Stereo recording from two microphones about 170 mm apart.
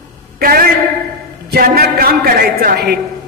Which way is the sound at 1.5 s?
60° right (ahead or behind).